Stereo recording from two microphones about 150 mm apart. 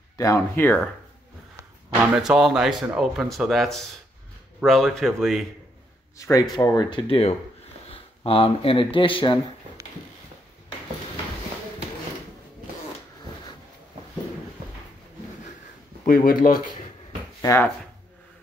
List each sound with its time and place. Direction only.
0.2 s speech: 15° left (ahead or behind)
2.1 s speech: 5° right (ahead or behind)
6.1 s speech: 20° left (ahead or behind)
7.1 s speech: 40° left (ahead or behind)
9.8 s a sound: 20° right (ahead or behind)
16.1 s speech: 70° left (ahead or behind)
17.4 s speech: 20° left (ahead or behind)